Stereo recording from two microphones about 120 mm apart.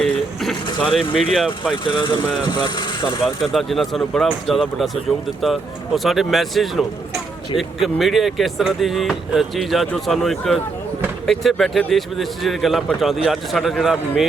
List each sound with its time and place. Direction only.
0.0 s a sound: 5° left (ahead or behind)
0.9 s speech: centre (ahead or behind)
2.6 s speech: 35° left (ahead or behind)
3.4 s speech: centre (ahead or behind)